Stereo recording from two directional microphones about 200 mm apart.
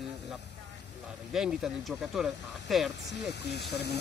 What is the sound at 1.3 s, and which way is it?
Speech, centre (ahead or behind).